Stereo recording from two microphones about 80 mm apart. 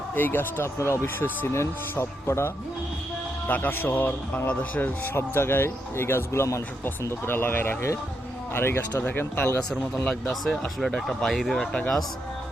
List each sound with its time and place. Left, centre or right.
0.2 s speech: left
3.4 s speech: left
10.8 s speech: centre